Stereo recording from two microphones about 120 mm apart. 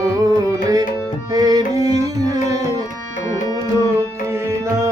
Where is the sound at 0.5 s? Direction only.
30° right (ahead or behind).